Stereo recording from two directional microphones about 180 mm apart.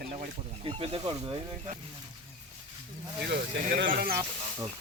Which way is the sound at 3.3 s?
60° right (ahead or behind).